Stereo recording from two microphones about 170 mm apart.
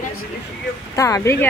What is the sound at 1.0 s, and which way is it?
Speech, 20° left (ahead or behind).